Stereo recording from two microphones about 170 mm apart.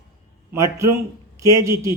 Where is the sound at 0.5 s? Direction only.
15° right (ahead or behind).